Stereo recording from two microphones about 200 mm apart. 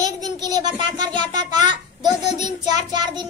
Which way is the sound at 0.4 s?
20° right (ahead or behind).